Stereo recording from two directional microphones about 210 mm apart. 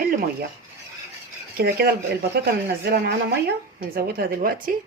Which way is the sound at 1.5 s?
45° right (ahead or behind).